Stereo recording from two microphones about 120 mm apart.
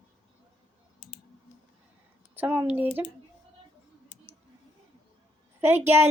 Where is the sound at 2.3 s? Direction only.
15° right (ahead or behind).